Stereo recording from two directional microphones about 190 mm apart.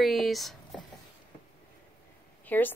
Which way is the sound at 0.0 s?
Centre (ahead or behind).